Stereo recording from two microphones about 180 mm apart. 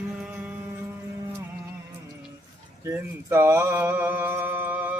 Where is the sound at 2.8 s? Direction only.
15° right (ahead or behind).